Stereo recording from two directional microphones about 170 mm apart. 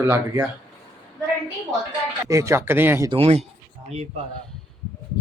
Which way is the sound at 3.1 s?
35° right (ahead or behind).